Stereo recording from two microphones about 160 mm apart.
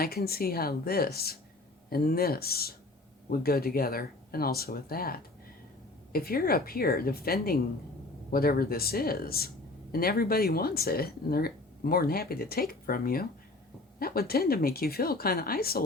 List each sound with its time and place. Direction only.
0.0 s speech: 75° left (ahead or behind)
6.1 s speech: 70° left (ahead or behind)